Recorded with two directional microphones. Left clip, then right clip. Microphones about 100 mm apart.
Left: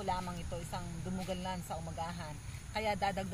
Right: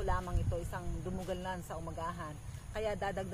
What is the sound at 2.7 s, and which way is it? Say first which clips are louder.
Speech: left 2 dB; 40° right (ahead or behind).